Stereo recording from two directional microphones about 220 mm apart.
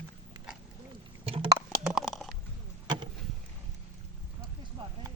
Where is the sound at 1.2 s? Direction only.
25° right (ahead or behind).